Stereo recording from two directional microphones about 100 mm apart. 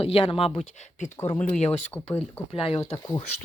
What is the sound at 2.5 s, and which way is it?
Speech, 70° left (ahead or behind).